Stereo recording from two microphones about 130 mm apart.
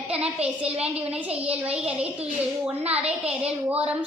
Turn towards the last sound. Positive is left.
turn(degrees=-10)  # may be behind; listen again after turning